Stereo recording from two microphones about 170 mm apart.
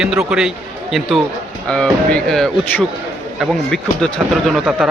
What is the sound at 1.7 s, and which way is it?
Speech, 5° left (ahead or behind).